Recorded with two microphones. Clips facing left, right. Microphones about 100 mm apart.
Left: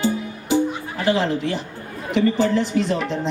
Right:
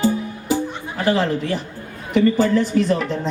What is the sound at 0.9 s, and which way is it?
A woman's voice, 45° right (ahead or behind).